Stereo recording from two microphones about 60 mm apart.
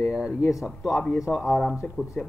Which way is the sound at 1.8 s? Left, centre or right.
Left.